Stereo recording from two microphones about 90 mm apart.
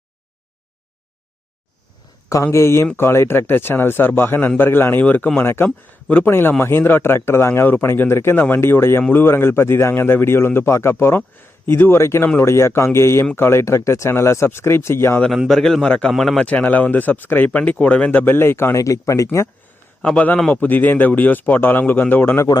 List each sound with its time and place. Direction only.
2.4 s speech: 30° left (ahead or behind)
15.4 s a man's voice: 5° left (ahead or behind)
16.5 s speech: 15° left (ahead or behind); by 19.5 s 35° left (ahead or behind)
20.0 s speech: 10° left (ahead or behind)